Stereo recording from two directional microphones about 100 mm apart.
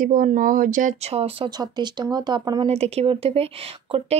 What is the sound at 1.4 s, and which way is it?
Speech, 45° right (ahead or behind).